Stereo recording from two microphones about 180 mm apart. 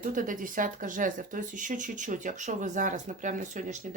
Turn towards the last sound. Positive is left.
turn(degrees=-45)  # may be behind; listen again after turning